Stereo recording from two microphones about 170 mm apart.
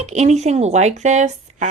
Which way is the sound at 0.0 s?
40° right (ahead or behind).